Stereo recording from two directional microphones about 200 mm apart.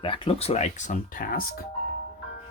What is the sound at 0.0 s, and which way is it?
Speech, 25° left (ahead or behind).